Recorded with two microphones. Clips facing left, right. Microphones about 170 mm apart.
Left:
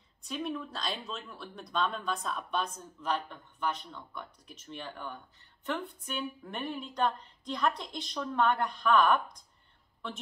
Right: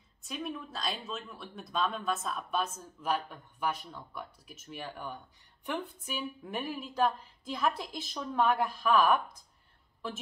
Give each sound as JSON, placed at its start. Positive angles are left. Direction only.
{"t": 0.2, "sound": "speech", "side_deg": 0}